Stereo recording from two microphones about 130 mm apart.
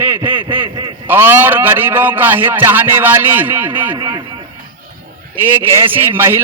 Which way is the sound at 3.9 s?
35° right (ahead or behind).